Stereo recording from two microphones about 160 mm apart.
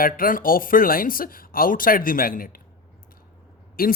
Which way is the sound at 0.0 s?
60° left (ahead or behind).